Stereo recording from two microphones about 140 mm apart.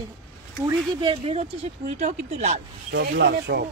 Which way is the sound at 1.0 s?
40° right (ahead or behind).